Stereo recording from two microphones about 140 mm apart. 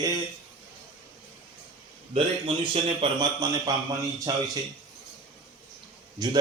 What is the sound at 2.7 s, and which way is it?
Speech, 40° right (ahead or behind).